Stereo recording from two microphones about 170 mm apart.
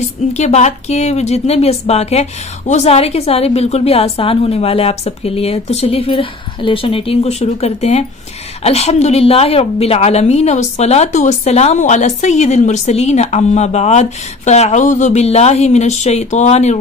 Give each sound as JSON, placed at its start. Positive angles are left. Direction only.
{"t": 0.3, "sound": "a woman's voice", "side_deg": 40}